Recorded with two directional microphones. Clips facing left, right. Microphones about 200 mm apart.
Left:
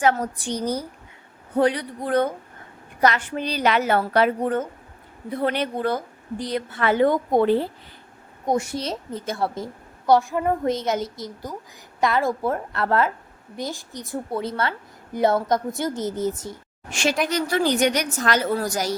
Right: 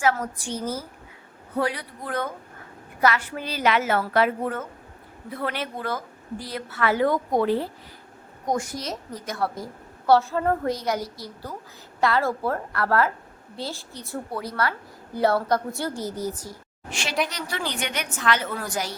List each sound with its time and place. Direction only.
0.0 s a woman's voice: 30° left (ahead or behind)
0.6 s a woman's voice: 5° right (ahead or behind)
1.5 s a woman's voice: 30° left (ahead or behind)
10.1 s a woman's voice: 15° left (ahead or behind)
16.9 s a woman's voice: 45° left (ahead or behind)